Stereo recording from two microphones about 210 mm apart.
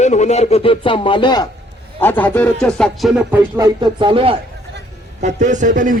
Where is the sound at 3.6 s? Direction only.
20° right (ahead or behind).